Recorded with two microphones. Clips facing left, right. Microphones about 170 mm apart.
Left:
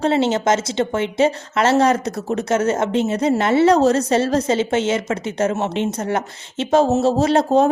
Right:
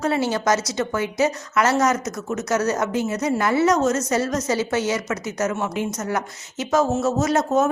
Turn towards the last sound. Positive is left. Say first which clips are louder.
# left 4 dB
turn(degrees=30)  # may be behind; listen again after turning